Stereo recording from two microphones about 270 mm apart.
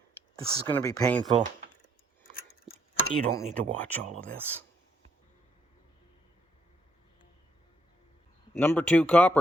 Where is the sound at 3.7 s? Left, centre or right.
Centre.